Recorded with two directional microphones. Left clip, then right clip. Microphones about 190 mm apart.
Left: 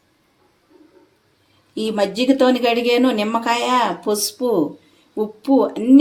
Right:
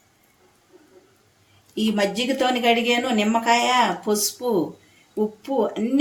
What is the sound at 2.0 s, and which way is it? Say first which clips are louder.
Speech: left 6 dB; 30° left (ahead or behind).